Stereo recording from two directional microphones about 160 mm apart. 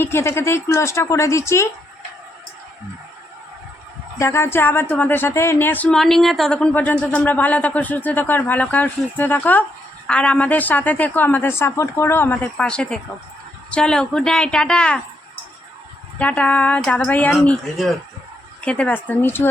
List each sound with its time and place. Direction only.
0.0 s speech: 15° left (ahead or behind)
4.2 s a woman's voice: 15° left (ahead or behind)
16.1 s speech: 10° left (ahead or behind)